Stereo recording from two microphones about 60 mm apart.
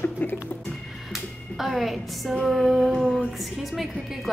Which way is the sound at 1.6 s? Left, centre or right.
Centre.